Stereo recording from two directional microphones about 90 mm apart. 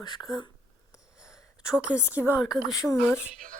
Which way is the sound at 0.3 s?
55° left (ahead or behind).